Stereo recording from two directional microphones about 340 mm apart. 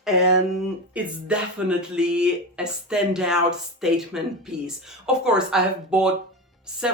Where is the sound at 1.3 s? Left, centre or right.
Centre.